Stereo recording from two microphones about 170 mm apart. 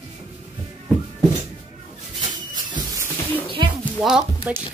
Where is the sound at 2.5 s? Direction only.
20° right (ahead or behind).